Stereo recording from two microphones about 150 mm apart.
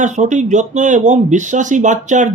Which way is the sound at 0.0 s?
55° right (ahead or behind).